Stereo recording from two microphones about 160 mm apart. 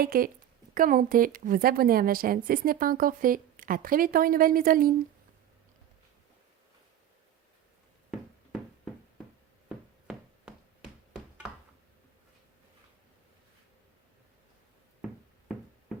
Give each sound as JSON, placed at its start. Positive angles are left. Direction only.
{"t": 0.0, "sound": "a woman's voice", "side_deg": -65}
{"t": 9.6, "sound": "tap", "side_deg": -5}